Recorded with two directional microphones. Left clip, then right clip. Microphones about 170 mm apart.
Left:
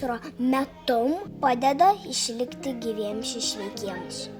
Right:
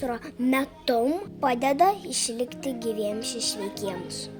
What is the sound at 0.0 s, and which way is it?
A woman's voice, 35° right (ahead or behind).